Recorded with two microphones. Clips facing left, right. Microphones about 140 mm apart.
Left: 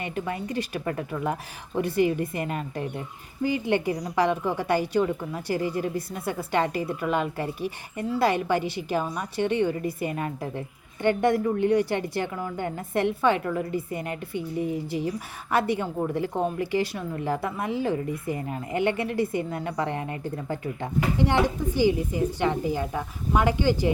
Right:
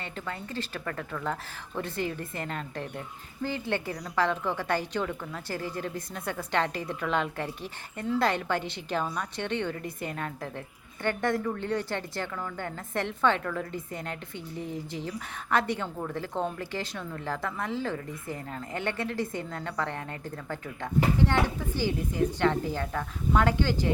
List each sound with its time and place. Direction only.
0.0 s a woman's voice: 15° left (ahead or behind)